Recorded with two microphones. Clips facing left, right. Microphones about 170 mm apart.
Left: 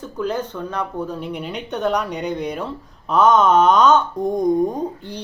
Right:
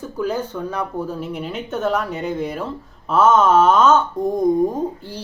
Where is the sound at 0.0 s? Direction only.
10° right (ahead or behind).